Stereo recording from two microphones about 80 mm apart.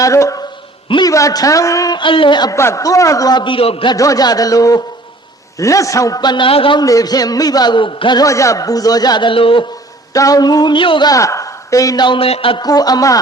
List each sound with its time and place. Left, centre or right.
0.0 s a man's voice: left
1.9 s speech: left
2.5 s a man's voice: left
3.3 s a man's voice: left
3.9 s a man's voice: left
6.8 s a man's voice: left
8.2 s a man's voice: left
10.1 s a man's voice: left
11.1 s speech: left
11.9 s speech: left
12.6 s a man's voice: left